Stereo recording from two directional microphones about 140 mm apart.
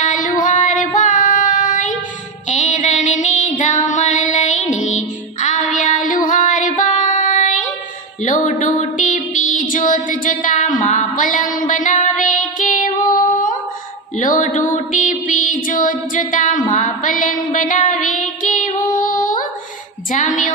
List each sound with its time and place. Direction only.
0.0 s child singing: 65° left (ahead or behind)
2.5 s music: 60° left (ahead or behind)
6.2 s female singing: 70° left (ahead or behind)
8.2 s music: 60° left (ahead or behind)
12.9 s female singing: 25° left (ahead or behind)
14.1 s mantra: 65° left (ahead or behind)
18.9 s female singing: 75° left (ahead or behind)
20.1 s music: 65° left (ahead or behind)